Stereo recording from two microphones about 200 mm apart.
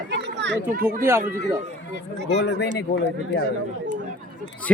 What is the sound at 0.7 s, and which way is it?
Speech, 45° right (ahead or behind).